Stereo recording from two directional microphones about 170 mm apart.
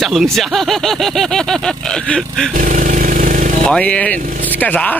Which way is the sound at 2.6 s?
45° right (ahead or behind).